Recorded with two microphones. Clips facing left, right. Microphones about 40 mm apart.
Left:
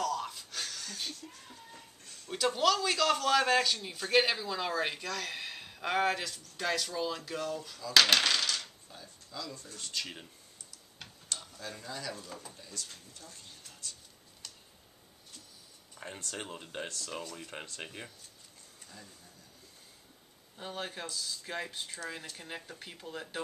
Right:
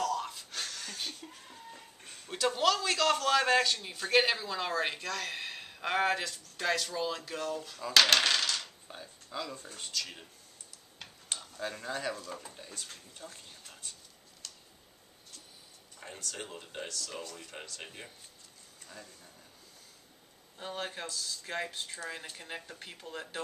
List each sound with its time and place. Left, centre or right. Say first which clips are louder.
0.0 s a sound: right 1 dB; centre
2.3 s a man's voice: even; centre
7.9 s coin: even; centre
8.8 s speech: right 3 dB; right
9.9 s speech: even; centre
11.3 s tick-tock: right 1 dB; right
11.8 s speech: right 5 dB; right
12.3 s speech: right 3 dB; centre
12.5 s speech: even; right
16.0 s speech: left 1 dB; centre
16.8 s speech: even; left
17.1 s speech: left 2 dB; centre
20.5 s a man's voice: right 1 dB; centre